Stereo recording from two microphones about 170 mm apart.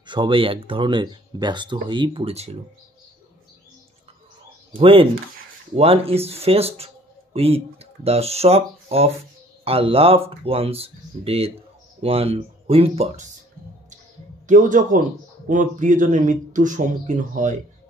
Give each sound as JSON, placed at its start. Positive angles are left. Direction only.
{"t": 0.0, "sound": "speech", "side_deg": -30}
{"t": 4.7, "sound": "speech", "side_deg": -35}
{"t": 14.5, "sound": "speech", "side_deg": -50}